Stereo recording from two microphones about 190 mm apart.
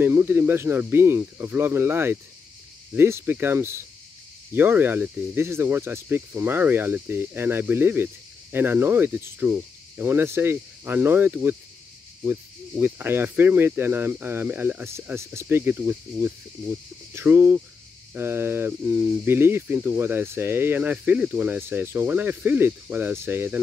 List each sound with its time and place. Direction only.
0.0 s speech: 10° right (ahead or behind)